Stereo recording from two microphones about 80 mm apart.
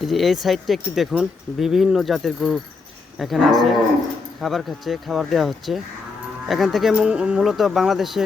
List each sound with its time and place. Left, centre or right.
0.1 s speech: centre
7.1 s speech: centre
7.4 s speech: centre